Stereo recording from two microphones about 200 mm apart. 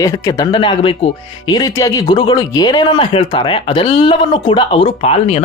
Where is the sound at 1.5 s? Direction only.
20° left (ahead or behind).